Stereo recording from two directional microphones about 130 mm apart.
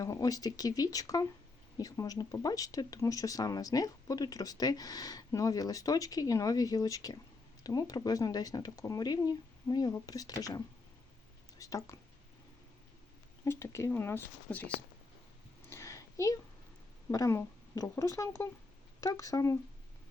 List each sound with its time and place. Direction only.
0.0 s speech: 25° left (ahead or behind)
13.4 s speech: 20° left (ahead or behind)
15.7 s a sound: 25° left (ahead or behind)
17.1 s speech: 25° left (ahead or behind)